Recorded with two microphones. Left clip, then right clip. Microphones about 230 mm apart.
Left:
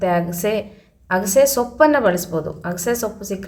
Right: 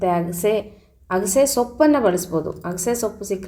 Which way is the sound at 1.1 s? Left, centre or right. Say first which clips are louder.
Left 3 dB; centre.